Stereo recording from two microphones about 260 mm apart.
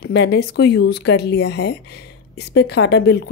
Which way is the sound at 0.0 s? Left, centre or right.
Left.